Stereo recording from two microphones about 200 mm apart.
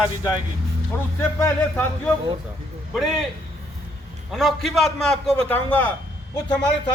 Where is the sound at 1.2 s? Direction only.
10° left (ahead or behind).